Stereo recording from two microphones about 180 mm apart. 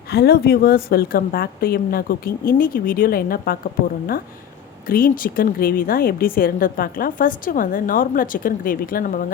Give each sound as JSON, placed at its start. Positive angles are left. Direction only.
{"t": 0.1, "sound": "a woman's voice", "side_deg": 60}
{"t": 4.9, "sound": "speech", "side_deg": 50}